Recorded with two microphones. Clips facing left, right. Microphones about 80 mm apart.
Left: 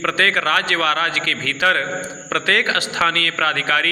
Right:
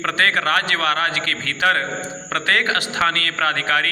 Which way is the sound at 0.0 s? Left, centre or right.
Right.